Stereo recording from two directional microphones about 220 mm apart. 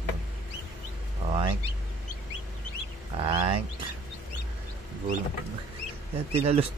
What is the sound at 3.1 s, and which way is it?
Speech, 25° right (ahead or behind).